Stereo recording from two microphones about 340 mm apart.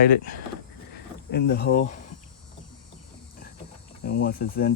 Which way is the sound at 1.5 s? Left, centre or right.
Left.